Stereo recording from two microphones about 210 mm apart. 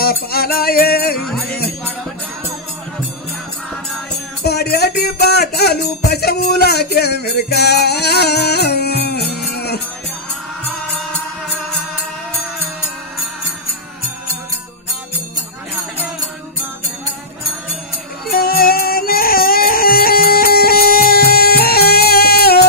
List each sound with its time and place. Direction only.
0.0 s music: 45° left (ahead or behind)
4.4 s music: 50° left (ahead or behind)
18.3 s music: 45° left (ahead or behind)